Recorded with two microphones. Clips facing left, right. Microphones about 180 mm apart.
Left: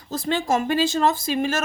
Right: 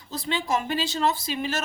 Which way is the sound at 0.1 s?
45° left (ahead or behind).